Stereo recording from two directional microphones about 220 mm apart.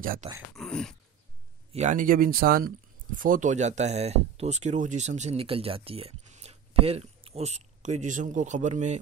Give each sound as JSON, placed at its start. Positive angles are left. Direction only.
{"t": 0.0, "sound": "speech", "side_deg": -40}
{"t": 0.6, "sound": "a sound", "side_deg": 0}
{"t": 1.7, "sound": "speech", "side_deg": -35}